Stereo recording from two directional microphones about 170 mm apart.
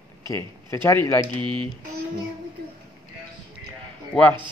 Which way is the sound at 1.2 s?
30° right (ahead or behind).